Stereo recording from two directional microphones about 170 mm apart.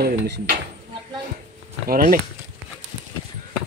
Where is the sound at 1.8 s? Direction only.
60° right (ahead or behind).